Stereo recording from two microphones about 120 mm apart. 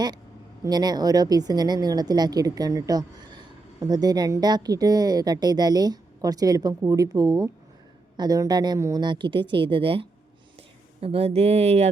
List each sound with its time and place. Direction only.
0.6 s a woman's voice: 35° right (ahead or behind); by 11.9 s 60° right (ahead or behind)